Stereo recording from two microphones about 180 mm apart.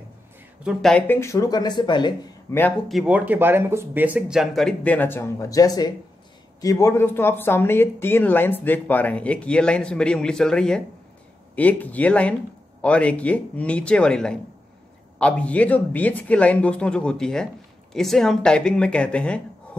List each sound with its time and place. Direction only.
0.7 s speech: 5° left (ahead or behind); by 2.1 s 25° left (ahead or behind)
2.5 s speech: 15° left (ahead or behind)
2.9 s speech: 5° right (ahead or behind)